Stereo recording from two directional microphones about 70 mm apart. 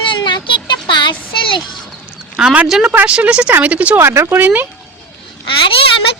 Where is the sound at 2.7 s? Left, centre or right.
Centre.